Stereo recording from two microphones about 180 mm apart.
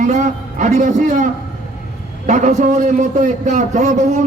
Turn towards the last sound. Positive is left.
turn(degrees=-40)  # may be behind; listen again after turning